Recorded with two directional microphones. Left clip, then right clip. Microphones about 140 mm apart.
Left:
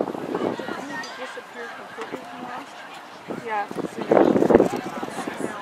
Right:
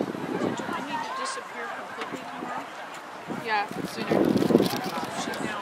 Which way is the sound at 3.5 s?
30° right (ahead or behind).